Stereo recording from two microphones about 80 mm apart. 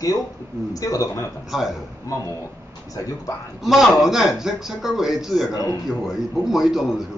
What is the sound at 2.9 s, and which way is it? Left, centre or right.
Speech, left.